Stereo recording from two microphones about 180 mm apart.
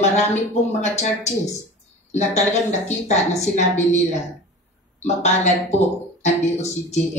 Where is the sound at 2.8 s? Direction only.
40° left (ahead or behind).